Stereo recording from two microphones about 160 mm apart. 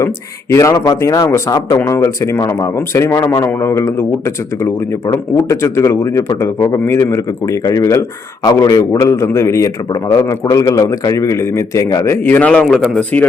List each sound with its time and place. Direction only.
0.5 s a man's voice: 20° left (ahead or behind)